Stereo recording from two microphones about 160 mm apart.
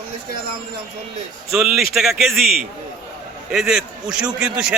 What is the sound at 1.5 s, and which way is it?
Speech, centre (ahead or behind).